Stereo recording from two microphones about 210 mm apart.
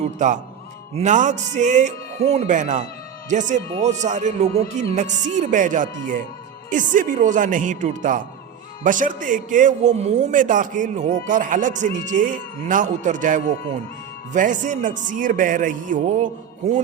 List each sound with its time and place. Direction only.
0.9 s a man's voice: 35° right (ahead or behind)